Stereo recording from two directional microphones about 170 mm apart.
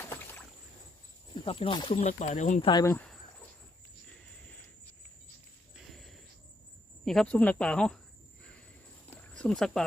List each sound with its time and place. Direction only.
1.5 s speech: 30° left (ahead or behind)
2.0 s speech: 45° left (ahead or behind)
2.6 s speech: 25° left (ahead or behind)
2.9 s speech: 5° left (ahead or behind)
5.7 s a sound: centre (ahead or behind)
7.0 s speech: 5° left (ahead or behind)
9.1 s a sound: 5° left (ahead or behind)